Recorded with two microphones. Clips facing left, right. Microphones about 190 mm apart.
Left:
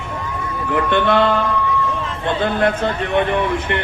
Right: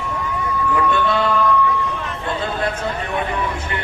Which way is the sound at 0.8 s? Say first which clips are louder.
Left 5 dB; 70° left (ahead or behind).